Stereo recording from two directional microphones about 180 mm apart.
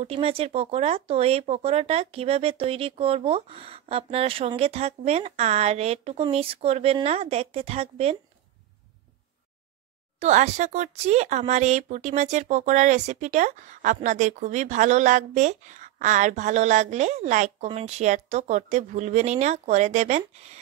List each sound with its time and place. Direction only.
0.0 s speech: 35° right (ahead or behind)
10.1 s speech: 40° right (ahead or behind)